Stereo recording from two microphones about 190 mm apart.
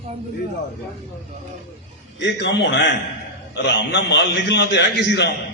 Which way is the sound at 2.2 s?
70° left (ahead or behind).